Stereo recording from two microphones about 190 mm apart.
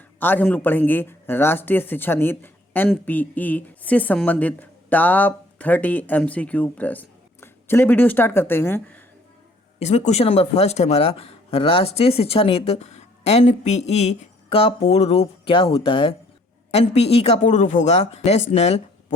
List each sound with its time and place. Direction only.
0.2 s speech: 10° left (ahead or behind)
9.7 s speech: 35° left (ahead or behind)